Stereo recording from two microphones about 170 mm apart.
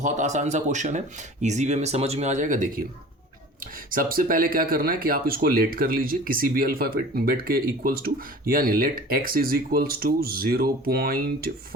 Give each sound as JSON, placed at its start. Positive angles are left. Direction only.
{"t": 0.0, "sound": "speech", "side_deg": -45}
{"t": 3.9, "sound": "speech", "side_deg": -55}